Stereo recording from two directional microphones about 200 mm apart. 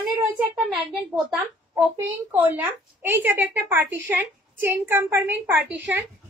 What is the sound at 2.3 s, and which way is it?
A woman's voice, 10° right (ahead or behind).